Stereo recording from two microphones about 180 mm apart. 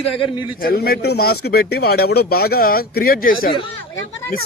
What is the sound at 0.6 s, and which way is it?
Speech, 55° left (ahead or behind).